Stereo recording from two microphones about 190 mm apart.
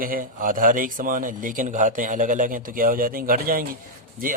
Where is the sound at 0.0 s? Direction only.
50° right (ahead or behind).